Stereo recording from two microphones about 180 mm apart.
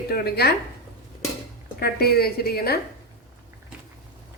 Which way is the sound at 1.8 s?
60° left (ahead or behind).